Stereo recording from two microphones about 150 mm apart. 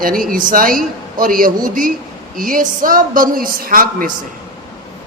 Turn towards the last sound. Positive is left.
turn(degrees=-70)  # may be behind; listen again after turning